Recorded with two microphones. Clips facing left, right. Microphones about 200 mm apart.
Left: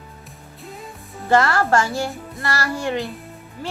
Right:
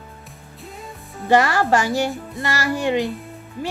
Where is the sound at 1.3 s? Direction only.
15° right (ahead or behind).